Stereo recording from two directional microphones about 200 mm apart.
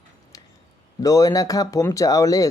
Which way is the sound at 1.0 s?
15° left (ahead or behind).